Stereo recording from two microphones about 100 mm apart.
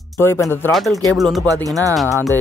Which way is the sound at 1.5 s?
35° right (ahead or behind).